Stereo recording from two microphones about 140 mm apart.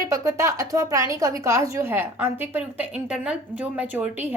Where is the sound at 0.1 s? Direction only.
20° right (ahead or behind).